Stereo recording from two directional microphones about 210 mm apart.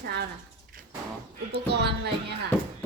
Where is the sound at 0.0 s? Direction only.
50° right (ahead or behind).